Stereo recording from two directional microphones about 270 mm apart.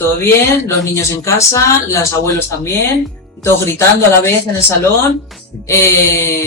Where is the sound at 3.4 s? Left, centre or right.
Centre.